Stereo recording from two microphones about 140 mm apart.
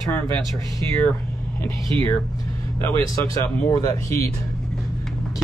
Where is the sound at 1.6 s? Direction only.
20° left (ahead or behind).